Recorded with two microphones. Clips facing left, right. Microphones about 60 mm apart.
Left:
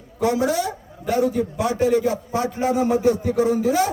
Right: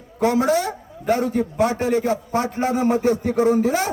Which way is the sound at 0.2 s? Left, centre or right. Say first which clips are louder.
Right 2 dB; right.